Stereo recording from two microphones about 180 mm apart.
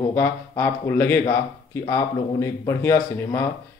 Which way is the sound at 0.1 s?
15° left (ahead or behind).